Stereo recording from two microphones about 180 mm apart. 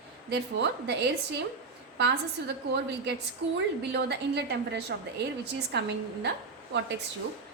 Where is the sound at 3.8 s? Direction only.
70° right (ahead or behind).